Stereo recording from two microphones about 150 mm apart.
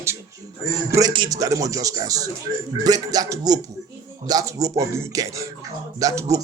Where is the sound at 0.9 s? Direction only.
20° right (ahead or behind).